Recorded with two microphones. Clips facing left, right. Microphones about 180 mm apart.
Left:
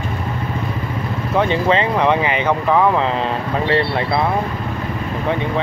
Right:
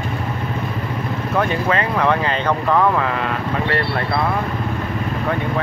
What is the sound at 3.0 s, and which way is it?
Speech, 25° left (ahead or behind).